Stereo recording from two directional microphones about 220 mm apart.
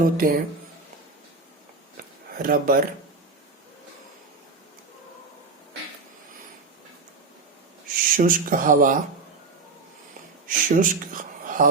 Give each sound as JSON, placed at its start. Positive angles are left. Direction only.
{"t": 0.0, "sound": "speech", "side_deg": -40}
{"t": 2.0, "sound": "a sound", "side_deg": -40}
{"t": 8.1, "sound": "speech", "side_deg": -40}
{"t": 10.4, "sound": "speech", "side_deg": -40}